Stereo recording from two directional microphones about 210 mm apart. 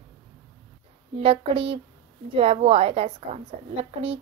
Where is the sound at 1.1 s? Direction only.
25° right (ahead or behind).